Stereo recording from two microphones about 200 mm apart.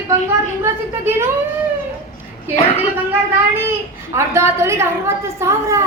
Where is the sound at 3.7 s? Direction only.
15° right (ahead or behind).